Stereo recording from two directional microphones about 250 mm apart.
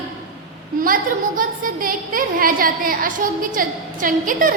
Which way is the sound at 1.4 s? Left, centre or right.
Right.